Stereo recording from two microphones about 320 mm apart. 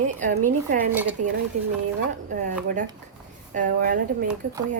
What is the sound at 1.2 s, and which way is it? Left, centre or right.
Speech, right.